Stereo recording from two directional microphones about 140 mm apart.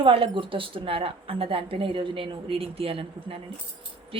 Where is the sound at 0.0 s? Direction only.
40° right (ahead or behind).